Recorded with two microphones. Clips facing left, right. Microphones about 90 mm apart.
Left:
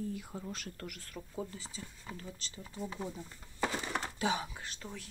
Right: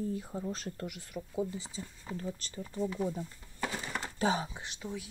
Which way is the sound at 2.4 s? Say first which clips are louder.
Right 6 dB; 50° right (ahead or behind).